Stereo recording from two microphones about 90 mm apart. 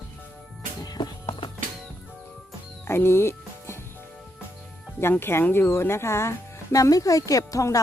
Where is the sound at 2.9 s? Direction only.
25° left (ahead or behind).